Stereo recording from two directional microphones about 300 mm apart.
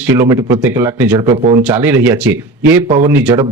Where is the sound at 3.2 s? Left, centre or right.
Centre.